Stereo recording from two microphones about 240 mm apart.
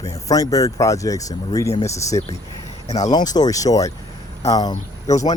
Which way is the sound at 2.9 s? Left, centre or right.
Left.